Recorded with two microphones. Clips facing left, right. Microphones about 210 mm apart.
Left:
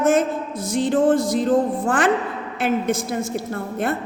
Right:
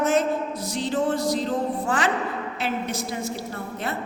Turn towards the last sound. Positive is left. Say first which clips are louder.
# left 7 dB
turn(degrees=50)  # may be behind; listen again after turning